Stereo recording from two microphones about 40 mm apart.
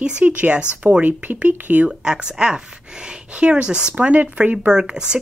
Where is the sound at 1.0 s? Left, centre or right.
Right.